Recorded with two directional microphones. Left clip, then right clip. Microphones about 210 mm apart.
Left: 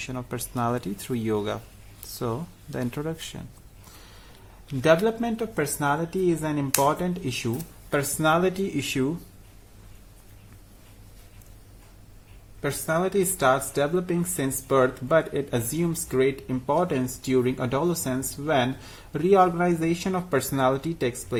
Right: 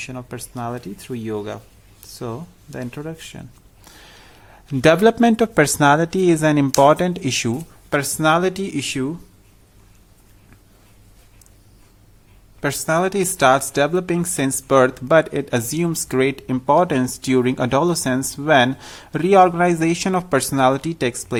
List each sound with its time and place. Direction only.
0.0 s speech: 10° right (ahead or behind)
4.8 s speech: 40° right (ahead or behind); by 9.1 s 15° right (ahead or behind)
12.6 s speech: 30° right (ahead or behind)